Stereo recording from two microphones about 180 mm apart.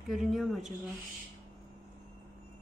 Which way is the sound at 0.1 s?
Centre (ahead or behind).